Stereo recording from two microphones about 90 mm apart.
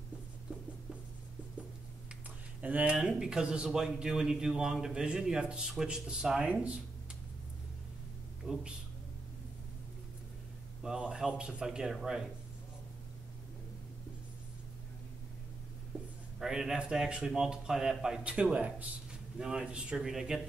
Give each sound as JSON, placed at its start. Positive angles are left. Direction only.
{"t": 2.6, "sound": "speech", "side_deg": -15}
{"t": 8.4, "sound": "speech", "side_deg": -5}
{"t": 10.8, "sound": "speech", "side_deg": -10}
{"t": 16.3, "sound": "speech", "side_deg": -5}